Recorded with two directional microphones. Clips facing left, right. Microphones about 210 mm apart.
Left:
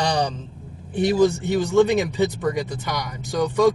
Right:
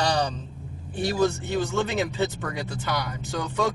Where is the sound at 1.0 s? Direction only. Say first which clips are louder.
Left 6 dB; 15° left (ahead or behind).